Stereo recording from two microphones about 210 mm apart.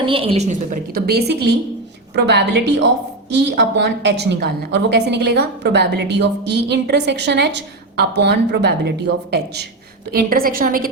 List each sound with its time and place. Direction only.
0.0 s a woman's voice: 25° right (ahead or behind)
0.9 s a woman's voice: 50° right (ahead or behind)